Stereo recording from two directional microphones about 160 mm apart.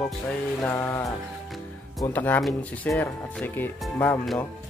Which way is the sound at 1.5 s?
Centre (ahead or behind).